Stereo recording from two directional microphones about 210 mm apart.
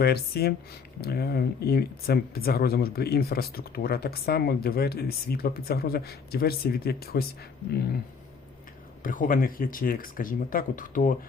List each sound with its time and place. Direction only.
0.0 s speech: 50° left (ahead or behind)
9.0 s speech: 40° left (ahead or behind)